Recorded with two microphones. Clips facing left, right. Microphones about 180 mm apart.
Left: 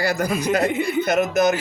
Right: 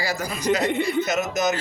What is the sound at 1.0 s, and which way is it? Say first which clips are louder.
Speech: left 5 dB; 55° left (ahead or behind).